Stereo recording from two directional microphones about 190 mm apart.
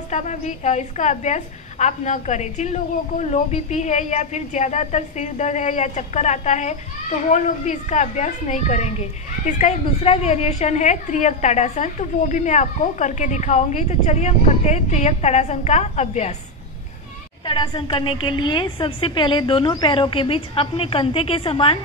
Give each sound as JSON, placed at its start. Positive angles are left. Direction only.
{"t": 0.1, "sound": "a woman's voice", "side_deg": 40}
{"t": 17.5, "sound": "a woman's voice", "side_deg": 25}